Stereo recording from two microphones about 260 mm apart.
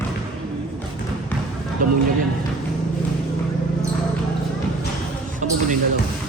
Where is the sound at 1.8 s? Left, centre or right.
Right.